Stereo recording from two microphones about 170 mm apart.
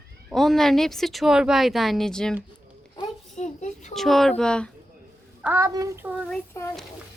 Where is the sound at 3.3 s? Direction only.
45° left (ahead or behind).